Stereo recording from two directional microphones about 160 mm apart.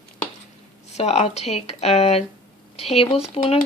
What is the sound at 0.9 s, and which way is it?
Speech, 45° left (ahead or behind).